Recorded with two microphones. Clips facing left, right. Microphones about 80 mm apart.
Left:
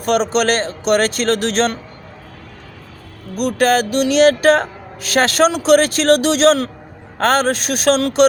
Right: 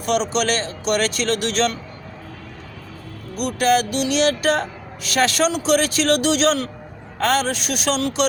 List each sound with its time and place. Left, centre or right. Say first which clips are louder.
0.0 s speech: left 4 dB; left
3.4 s speech: left 3 dB; left